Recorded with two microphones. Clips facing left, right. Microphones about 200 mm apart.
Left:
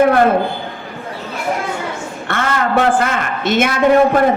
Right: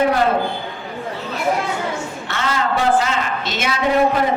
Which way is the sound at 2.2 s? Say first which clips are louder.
Left 5 dB; 55° left (ahead or behind).